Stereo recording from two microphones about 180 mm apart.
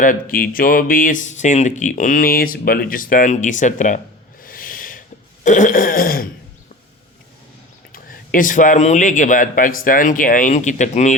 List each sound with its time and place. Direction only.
0.0 s speech: 50° left (ahead or behind)
4.4 s throat clearing: 50° left (ahead or behind)
7.9 s speech: 50° left (ahead or behind)